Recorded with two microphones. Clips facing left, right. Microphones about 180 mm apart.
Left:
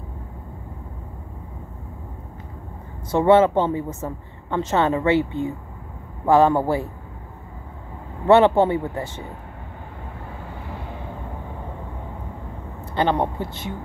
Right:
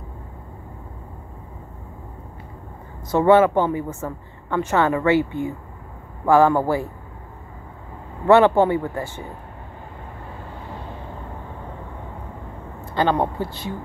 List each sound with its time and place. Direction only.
3.1 s speech: 25° left (ahead or behind)
8.3 s speech: 20° left (ahead or behind)
12.9 s speech: 20° left (ahead or behind)